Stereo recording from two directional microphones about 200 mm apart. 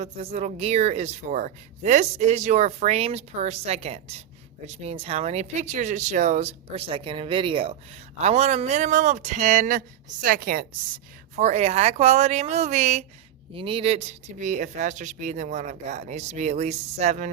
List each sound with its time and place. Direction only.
0.0 s speech: 30° right (ahead or behind)
11.3 s speech: 35° right (ahead or behind)